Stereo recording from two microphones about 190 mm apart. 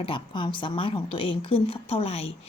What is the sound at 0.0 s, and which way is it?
A woman's voice, 25° left (ahead or behind).